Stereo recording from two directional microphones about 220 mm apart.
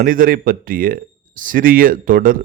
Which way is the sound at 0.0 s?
40° right (ahead or behind).